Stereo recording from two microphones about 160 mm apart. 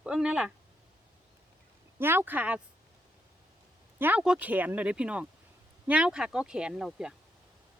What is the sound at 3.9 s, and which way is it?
A woman's voice, 10° right (ahead or behind).